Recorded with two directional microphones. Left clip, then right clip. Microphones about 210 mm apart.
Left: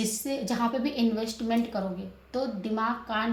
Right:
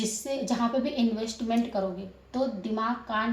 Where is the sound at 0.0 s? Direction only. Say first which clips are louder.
Even; 30° left (ahead or behind).